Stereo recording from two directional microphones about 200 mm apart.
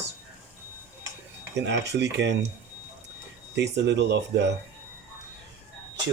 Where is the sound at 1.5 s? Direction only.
60° right (ahead or behind).